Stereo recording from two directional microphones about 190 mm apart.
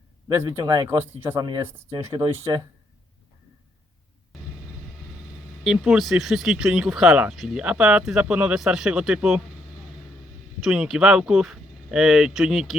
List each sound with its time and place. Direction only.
0.3 s speech: 20° right (ahead or behind)
5.6 s speech: 5° right (ahead or behind)
10.6 s speech: centre (ahead or behind)